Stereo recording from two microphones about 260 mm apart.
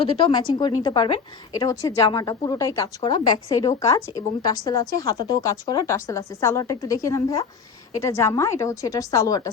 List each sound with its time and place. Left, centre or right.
0.0 s speech: left